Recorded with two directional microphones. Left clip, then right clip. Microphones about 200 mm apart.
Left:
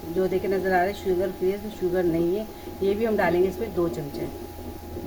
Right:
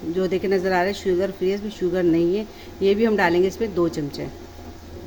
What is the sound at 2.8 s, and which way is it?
Speech, 55° right (ahead or behind).